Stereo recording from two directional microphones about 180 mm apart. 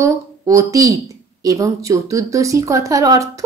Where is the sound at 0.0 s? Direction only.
20° right (ahead or behind).